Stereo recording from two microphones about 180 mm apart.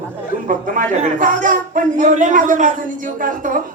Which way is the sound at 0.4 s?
45° right (ahead or behind).